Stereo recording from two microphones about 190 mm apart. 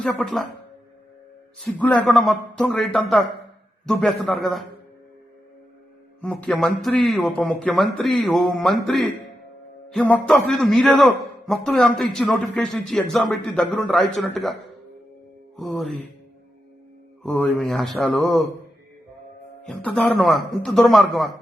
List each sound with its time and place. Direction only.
0.2 s a man's voice: centre (ahead or behind)
1.5 s a man's voice: 5° left (ahead or behind)
6.2 s a man's voice: 5° left (ahead or behind)
15.5 s a man's voice: centre (ahead or behind)
17.2 s a man's voice: 5° left (ahead or behind)
19.6 s a man's voice: 5° left (ahead or behind)